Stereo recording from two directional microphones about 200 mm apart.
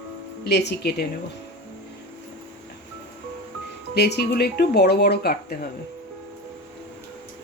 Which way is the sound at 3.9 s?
55° left (ahead or behind).